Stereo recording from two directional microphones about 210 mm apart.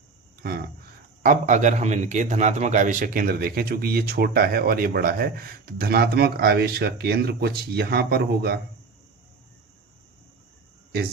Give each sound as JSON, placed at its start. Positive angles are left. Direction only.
{"t": 0.4, "sound": "a man's voice", "side_deg": -45}
{"t": 1.2, "sound": "a man's voice", "side_deg": -35}